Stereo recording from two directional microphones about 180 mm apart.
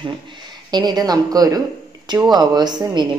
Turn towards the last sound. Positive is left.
turn(degrees=-25)  # may be behind; listen again after turning